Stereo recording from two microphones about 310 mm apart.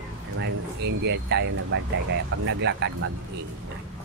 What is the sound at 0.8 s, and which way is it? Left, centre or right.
A woman's voice, right.